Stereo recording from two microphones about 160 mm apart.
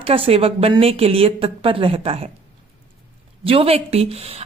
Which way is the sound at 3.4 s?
35° right (ahead or behind).